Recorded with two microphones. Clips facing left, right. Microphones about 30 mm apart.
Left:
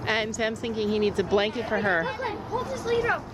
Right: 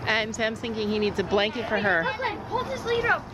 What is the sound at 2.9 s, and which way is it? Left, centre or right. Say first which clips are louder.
Speech: right 1 dB; centre.